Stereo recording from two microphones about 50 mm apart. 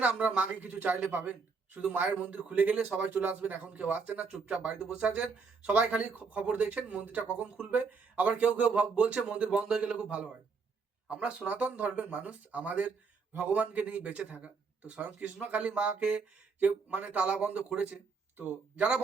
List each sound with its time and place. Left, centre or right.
0.0 s speech: right